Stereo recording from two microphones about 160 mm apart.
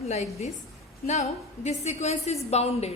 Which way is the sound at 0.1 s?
45° left (ahead or behind).